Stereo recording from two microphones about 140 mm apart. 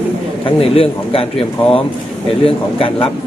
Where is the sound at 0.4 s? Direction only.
40° left (ahead or behind).